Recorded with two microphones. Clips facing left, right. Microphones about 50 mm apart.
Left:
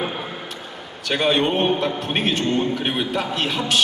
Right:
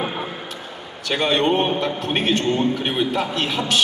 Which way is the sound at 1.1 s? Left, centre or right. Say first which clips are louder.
Right 1 dB; centre.